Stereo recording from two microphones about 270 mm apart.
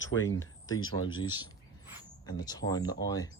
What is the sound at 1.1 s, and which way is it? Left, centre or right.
Speech, centre.